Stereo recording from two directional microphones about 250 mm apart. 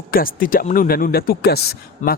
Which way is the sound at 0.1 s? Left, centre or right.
Left.